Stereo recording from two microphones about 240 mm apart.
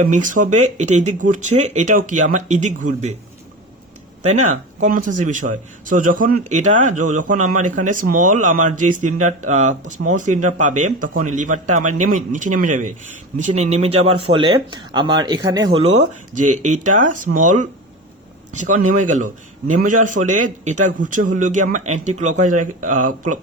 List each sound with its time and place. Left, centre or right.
0.2 s speech: right
4.2 s speech: right
16.0 s speech: right
16.5 s speech: right
16.8 s speech: right
17.3 s speech: right
18.5 s speech: right
18.8 s speech: right
19.0 s speech: right